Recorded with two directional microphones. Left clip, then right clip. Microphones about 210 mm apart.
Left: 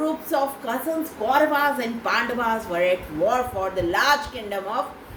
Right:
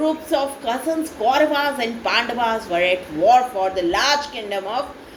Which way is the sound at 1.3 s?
25° left (ahead or behind).